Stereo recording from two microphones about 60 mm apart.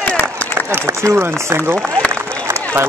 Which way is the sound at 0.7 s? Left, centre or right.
Right.